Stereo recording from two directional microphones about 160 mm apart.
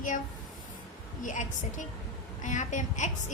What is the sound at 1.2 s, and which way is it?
A woman's voice, 50° left (ahead or behind).